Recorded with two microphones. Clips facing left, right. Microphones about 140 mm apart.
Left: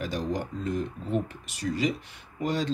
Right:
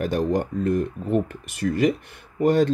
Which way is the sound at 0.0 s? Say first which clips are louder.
Right 8 dB; 55° right (ahead or behind).